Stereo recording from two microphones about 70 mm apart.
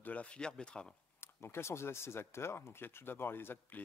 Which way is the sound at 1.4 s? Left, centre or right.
Left.